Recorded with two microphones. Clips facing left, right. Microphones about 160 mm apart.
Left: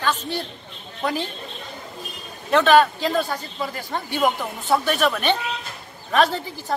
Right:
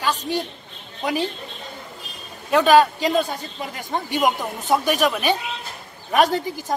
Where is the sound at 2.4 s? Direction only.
10° right (ahead or behind).